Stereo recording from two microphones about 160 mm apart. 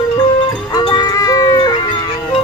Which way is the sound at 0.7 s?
25° left (ahead or behind).